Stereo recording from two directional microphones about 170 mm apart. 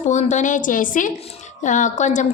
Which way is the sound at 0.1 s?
45° left (ahead or behind).